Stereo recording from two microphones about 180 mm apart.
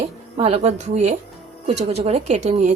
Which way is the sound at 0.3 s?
35° right (ahead or behind).